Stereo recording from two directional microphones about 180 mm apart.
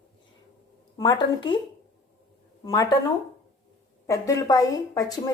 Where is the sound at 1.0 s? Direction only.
25° left (ahead or behind).